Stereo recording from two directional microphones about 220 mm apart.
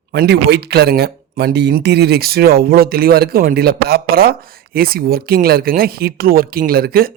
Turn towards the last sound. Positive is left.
turn(degrees=-45)  # may be behind; listen again after turning